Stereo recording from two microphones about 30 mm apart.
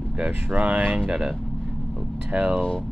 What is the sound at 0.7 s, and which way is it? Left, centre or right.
Speech, right.